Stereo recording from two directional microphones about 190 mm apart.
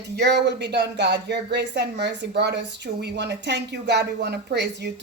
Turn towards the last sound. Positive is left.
turn(degrees=-60)  # may be behind; listen again after turning